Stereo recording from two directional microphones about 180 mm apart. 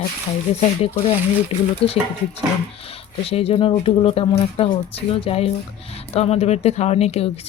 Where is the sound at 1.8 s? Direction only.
30° left (ahead or behind).